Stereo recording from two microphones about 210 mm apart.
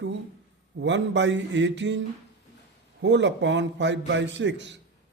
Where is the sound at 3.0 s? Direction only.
55° right (ahead or behind).